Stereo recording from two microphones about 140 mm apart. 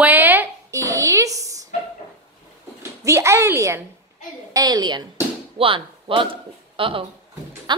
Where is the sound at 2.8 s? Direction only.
20° right (ahead or behind).